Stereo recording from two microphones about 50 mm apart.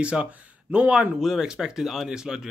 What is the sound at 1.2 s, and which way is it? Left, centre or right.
Speech, centre.